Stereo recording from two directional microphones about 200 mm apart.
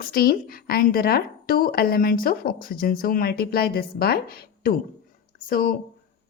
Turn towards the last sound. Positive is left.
turn(degrees=45)  # may be behind; listen again after turning